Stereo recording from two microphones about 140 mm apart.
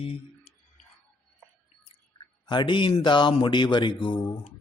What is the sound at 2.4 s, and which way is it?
A man's voice, 35° left (ahead or behind).